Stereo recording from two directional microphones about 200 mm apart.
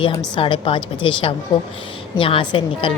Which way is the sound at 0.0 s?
20° left (ahead or behind).